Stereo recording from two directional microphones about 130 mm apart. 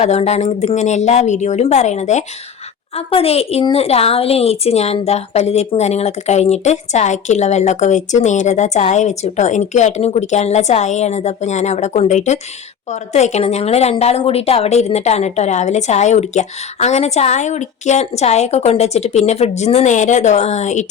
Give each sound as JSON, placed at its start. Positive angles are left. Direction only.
{"t": 0.0, "sound": "speech", "side_deg": 55}
{"t": 2.9, "sound": "a woman's voice", "side_deg": 50}